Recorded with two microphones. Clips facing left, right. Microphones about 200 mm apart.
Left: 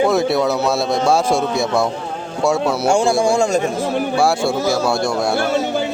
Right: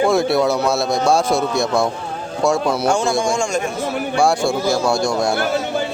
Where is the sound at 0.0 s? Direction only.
Centre (ahead or behind).